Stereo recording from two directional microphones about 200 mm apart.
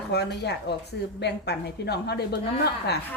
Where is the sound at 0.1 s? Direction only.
55° left (ahead or behind).